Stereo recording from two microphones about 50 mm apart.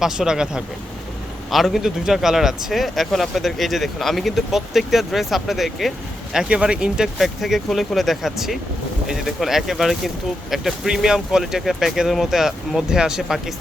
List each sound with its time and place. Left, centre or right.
0.0 s speech: centre
1.5 s speech: centre
6.5 s speech: centre
7.4 s speech: centre